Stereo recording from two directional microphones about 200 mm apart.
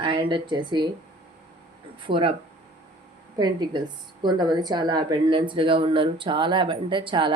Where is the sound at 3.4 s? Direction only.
20° right (ahead or behind).